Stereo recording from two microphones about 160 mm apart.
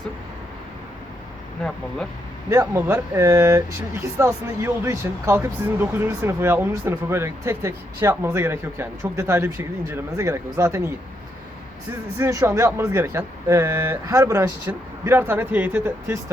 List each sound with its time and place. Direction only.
2.5 s speech: 15° right (ahead or behind)
12.2 s speech: 20° right (ahead or behind)